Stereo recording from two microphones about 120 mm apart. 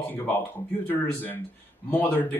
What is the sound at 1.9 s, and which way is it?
Speech, 15° left (ahead or behind).